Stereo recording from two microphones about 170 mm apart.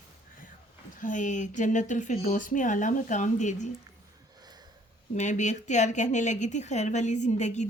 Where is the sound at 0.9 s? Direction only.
50° left (ahead or behind).